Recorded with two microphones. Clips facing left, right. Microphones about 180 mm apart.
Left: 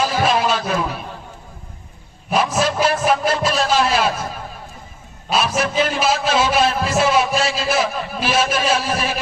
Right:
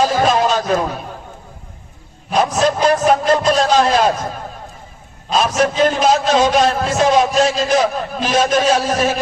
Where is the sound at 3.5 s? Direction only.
40° right (ahead or behind).